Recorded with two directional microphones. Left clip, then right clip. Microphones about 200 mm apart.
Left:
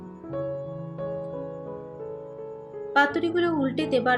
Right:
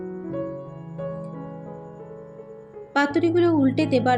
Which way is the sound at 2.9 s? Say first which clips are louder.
Right 1 dB; 30° right (ahead or behind).